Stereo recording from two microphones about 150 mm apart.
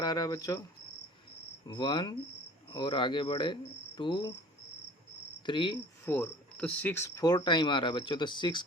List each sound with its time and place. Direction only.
0.0 s speech: 25° left (ahead or behind)
1.6 s speech: 30° left (ahead or behind)
5.5 s speech: 35° left (ahead or behind)
6.1 s speech: 10° left (ahead or behind); by 8.6 s 30° left (ahead or behind)